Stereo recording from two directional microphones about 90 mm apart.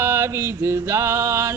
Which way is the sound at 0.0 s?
30° right (ahead or behind).